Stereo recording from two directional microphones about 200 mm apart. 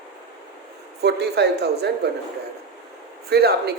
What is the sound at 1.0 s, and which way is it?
Speech, 55° right (ahead or behind).